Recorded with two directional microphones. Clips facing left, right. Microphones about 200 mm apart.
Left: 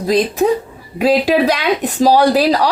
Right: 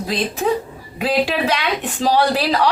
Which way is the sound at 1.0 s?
40° left (ahead or behind).